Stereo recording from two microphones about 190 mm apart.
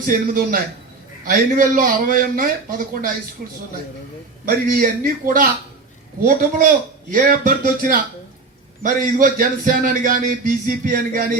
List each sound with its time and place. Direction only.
0.0 s a man's voice: 50° right (ahead or behind)
4.4 s a man's voice: 45° right (ahead or behind)